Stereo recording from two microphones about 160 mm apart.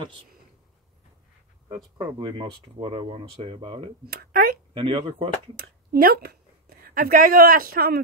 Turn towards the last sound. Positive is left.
turn(degrees=-70)  # may be behind; listen again after turning